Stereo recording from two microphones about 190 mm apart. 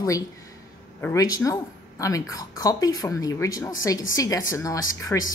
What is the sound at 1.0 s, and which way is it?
A woman's voice, 20° left (ahead or behind).